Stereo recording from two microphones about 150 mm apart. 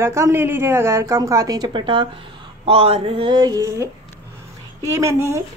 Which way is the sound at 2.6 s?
40° right (ahead or behind).